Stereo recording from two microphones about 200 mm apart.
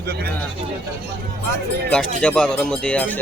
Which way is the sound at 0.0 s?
50° right (ahead or behind).